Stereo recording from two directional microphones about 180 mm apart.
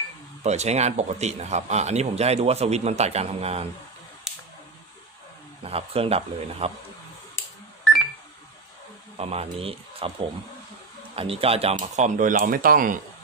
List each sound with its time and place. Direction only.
0.4 s speech: 40° right (ahead or behind)
4.3 s a sound: centre (ahead or behind)
5.6 s speech: 35° right (ahead or behind)
9.2 s speech: 35° right (ahead or behind)
11.1 s speech: 30° right (ahead or behind); by 13.0 s 50° right (ahead or behind)